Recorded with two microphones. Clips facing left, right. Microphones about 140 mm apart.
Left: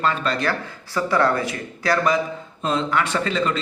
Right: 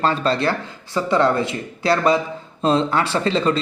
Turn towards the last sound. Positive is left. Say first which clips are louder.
# right 3 dB
turn(degrees=-30)  # may be behind; listen again after turning